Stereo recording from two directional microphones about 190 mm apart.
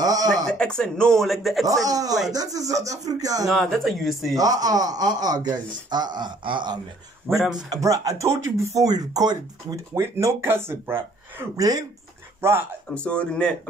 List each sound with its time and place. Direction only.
0.0 s speech: 20° right (ahead or behind)
0.5 s speech: 5° left (ahead or behind)
1.9 s a man's voice: 20° right (ahead or behind)
3.4 s speech: centre (ahead or behind)
4.4 s a man's voice: 20° right (ahead or behind)
7.2 s speech: centre (ahead or behind)
7.7 s speech: 15° right (ahead or behind)
12.9 s speech: 5° left (ahead or behind)